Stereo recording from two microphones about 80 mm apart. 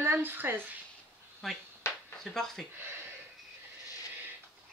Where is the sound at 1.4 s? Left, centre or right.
Centre.